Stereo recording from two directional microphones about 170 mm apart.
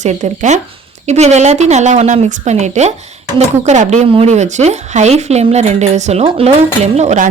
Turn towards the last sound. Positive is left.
turn(degrees=-40)  # may be behind; listen again after turning